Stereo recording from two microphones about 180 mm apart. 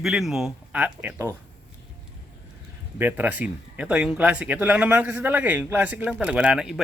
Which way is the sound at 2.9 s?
10° right (ahead or behind).